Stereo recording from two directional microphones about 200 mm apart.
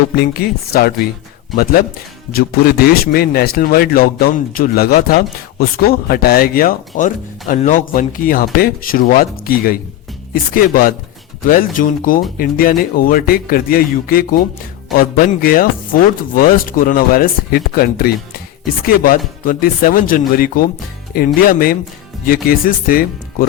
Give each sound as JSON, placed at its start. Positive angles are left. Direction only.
{"t": 0.2, "sound": "speech", "side_deg": 50}
{"t": 2.3, "sound": "speech", "side_deg": 50}